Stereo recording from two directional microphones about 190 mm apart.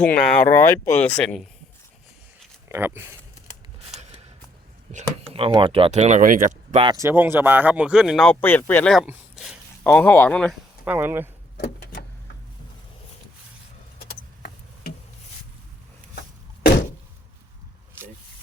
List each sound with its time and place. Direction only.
0.0 s speech: 5° left (ahead or behind)
2.6 s speech: 10° right (ahead or behind)
3.9 s a sound: centre (ahead or behind)
5.3 s speech: 30° right (ahead or behind)
6.8 s speech: 15° right (ahead or behind); by 10.5 s 10° left (ahead or behind)
10.8 s speech: 10° right (ahead or behind)
11.5 s vehicle: 50° left (ahead or behind)
14.1 s vehicle: 55° left (ahead or behind)